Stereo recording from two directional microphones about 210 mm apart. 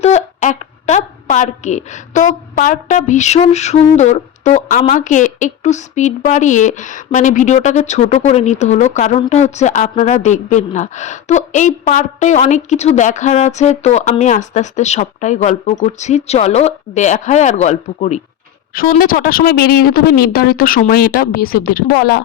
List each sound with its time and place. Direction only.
0.0 s a woman's voice: 35° left (ahead or behind)